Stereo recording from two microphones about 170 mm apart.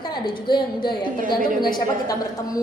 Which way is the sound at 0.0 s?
25° left (ahead or behind).